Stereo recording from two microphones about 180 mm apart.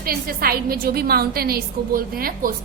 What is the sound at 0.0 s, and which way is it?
A woman's voice, 55° right (ahead or behind).